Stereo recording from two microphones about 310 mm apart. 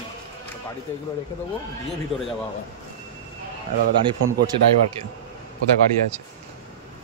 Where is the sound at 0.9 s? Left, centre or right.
Centre.